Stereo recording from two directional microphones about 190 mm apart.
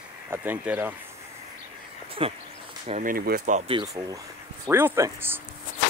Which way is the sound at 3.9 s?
15° right (ahead or behind).